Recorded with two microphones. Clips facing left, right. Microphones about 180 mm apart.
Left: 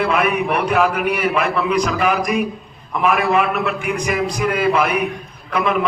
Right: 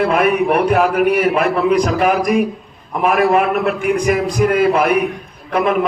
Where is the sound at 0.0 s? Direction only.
45° right (ahead or behind).